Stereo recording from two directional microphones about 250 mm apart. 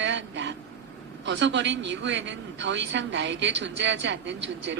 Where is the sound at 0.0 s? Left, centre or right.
Right.